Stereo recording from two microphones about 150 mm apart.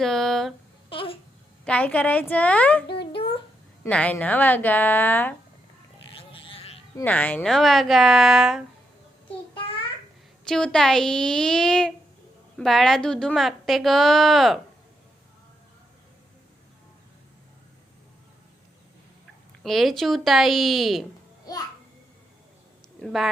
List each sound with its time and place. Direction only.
0.0 s a woman's voice: centre (ahead or behind)
0.9 s babbling: 35° left (ahead or behind)
1.6 s a woman's voice: 10° left (ahead or behind)
3.8 s a woman's voice: 10° left (ahead or behind)
6.1 s sheep: 35° left (ahead or behind)
7.0 s a woman's voice: 10° left (ahead or behind)
10.5 s a woman's voice: 5° left (ahead or behind)
19.6 s a woman's voice: centre (ahead or behind)
23.0 s a woman's voice: centre (ahead or behind)